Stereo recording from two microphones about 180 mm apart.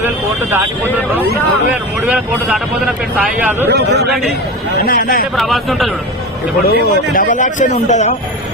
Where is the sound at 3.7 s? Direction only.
70° right (ahead or behind).